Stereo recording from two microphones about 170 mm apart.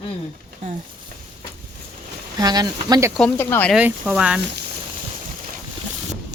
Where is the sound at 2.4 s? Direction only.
25° right (ahead or behind).